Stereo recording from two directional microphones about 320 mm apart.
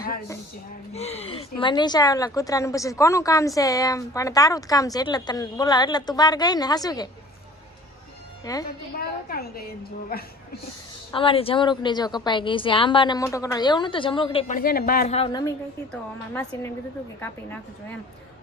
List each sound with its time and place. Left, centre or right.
0.9 s a woman's voice: centre
8.6 s a woman's voice: left
11.1 s a woman's voice: centre